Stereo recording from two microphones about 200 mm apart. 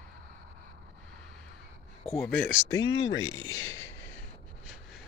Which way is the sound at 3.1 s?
80° left.